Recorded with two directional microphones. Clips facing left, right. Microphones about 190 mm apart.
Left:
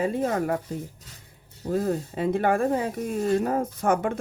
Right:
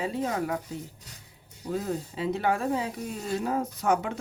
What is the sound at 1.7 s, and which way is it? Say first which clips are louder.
Speech: left 5 dB; 55° left (ahead or behind).